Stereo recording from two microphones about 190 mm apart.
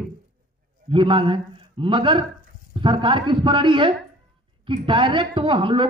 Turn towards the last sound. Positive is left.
turn(degrees=-25)  # may be behind; listen again after turning